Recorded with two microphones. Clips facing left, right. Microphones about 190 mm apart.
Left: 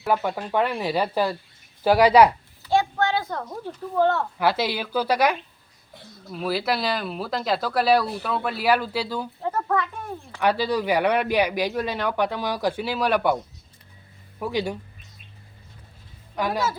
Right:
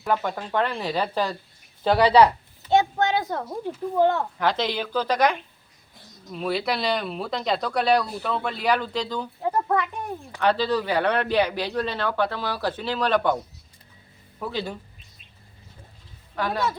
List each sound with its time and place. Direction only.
0.0 s speech: 10° left (ahead or behind)
2.6 s a child's voice: 20° right (ahead or behind)
4.4 s speech: 10° left (ahead or behind)
9.4 s speech: 15° right (ahead or behind)
10.4 s speech: 10° left (ahead or behind)
16.3 s a woman's voice: 10° left (ahead or behind)